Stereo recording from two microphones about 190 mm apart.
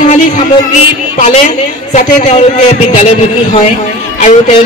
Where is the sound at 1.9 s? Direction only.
40° left (ahead or behind).